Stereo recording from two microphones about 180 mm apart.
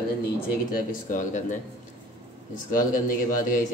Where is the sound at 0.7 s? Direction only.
50° left (ahead or behind).